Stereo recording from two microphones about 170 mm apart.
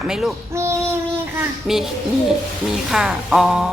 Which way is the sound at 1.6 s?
Centre (ahead or behind).